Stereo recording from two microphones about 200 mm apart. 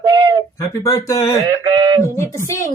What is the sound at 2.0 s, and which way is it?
Speech, 15° left (ahead or behind).